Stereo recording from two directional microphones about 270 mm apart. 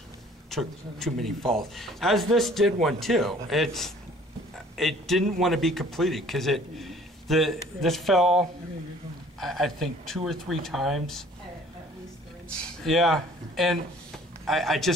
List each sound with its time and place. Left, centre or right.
0.5 s a man's voice: centre
12.8 s speech: centre